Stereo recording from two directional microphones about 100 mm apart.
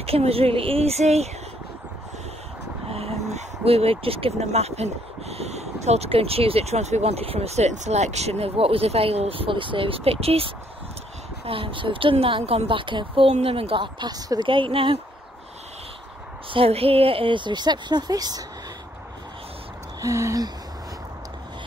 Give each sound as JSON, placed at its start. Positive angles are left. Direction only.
{"t": 0.0, "sound": "speech", "side_deg": -75}
{"t": 2.9, "sound": "speech", "side_deg": -90}
{"t": 11.4, "sound": "a woman's voice", "side_deg": -65}
{"t": 13.9, "sound": "speech", "side_deg": -40}
{"t": 14.5, "sound": "a woman's voice", "side_deg": -60}
{"t": 16.4, "sound": "speech", "side_deg": -70}
{"t": 20.0, "sound": "a sound", "side_deg": -30}